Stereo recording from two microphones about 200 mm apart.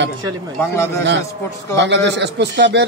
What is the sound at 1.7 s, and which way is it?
A man's voice, 60° right (ahead or behind).